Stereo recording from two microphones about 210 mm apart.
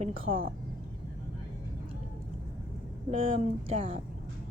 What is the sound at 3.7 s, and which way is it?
Speech, 25° right (ahead or behind).